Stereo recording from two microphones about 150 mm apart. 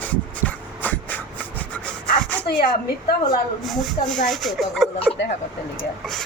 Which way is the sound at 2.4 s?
90° left.